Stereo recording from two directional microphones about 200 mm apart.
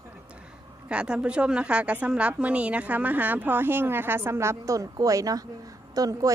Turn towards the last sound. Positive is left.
turn(degrees=-20)  # may be behind; listen again after turning